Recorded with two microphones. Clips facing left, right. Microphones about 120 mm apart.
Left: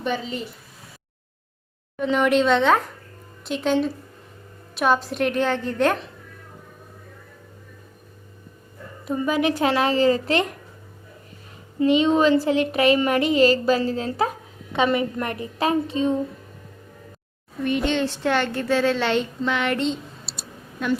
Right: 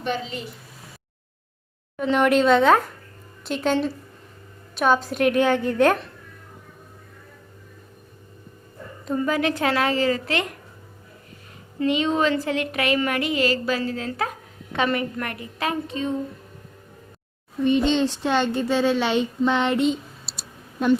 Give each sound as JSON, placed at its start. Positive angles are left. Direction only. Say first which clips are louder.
{"t": 2.0, "sound": "speech", "louder": "right 1 dB", "side_deg": 0}
{"t": 9.0, "sound": "speech", "louder": "left 1 dB", "side_deg": 15}
{"t": 11.8, "sound": "speech", "louder": "left 4 dB", "side_deg": 20}
{"t": 17.6, "sound": "a woman's voice", "louder": "right 3 dB", "side_deg": -20}
{"t": 19.8, "sound": "a sound", "louder": "right 3 dB", "side_deg": -5}